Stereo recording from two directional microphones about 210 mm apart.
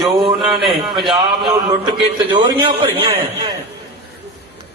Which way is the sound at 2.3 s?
25° right (ahead or behind).